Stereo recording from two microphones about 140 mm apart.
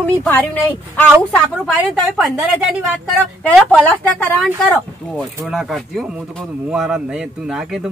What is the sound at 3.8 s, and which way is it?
Speech, 10° left (ahead or behind).